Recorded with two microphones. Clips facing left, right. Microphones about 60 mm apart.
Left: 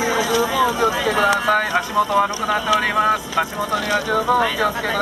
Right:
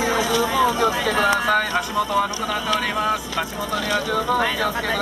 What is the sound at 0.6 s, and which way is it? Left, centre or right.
Speech, centre.